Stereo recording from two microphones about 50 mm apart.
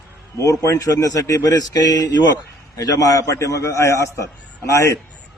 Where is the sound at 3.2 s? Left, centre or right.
Left.